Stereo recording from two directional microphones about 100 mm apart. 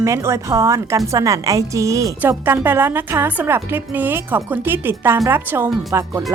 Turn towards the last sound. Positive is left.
turn(degrees=-30)  # may be behind; listen again after turning